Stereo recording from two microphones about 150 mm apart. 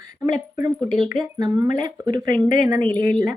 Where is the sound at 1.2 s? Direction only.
25° right (ahead or behind).